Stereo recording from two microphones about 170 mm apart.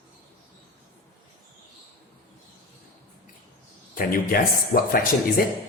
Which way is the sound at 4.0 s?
55° left (ahead or behind).